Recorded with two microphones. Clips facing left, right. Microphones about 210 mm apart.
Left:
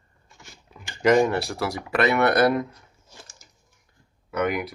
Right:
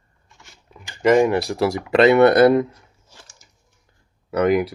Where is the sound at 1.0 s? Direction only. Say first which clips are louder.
Right 3 dB; 5° right (ahead or behind).